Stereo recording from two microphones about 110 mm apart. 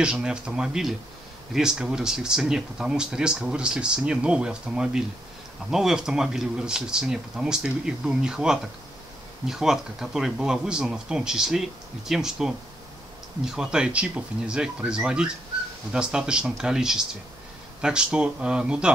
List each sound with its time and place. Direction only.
0.0 s speech: 10° right (ahead or behind)